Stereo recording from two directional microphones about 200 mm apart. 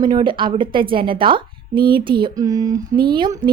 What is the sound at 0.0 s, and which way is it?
A woman's voice, 20° right (ahead or behind).